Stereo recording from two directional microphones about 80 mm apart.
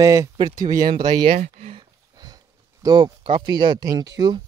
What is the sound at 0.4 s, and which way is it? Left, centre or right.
Speech, right.